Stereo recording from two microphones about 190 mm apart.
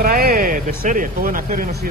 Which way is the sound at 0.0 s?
50° right (ahead or behind).